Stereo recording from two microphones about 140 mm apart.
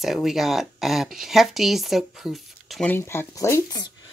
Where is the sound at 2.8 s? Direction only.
15° left (ahead or behind).